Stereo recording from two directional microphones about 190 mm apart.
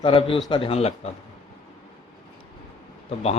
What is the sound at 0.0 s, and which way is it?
Speech, 30° left (ahead or behind).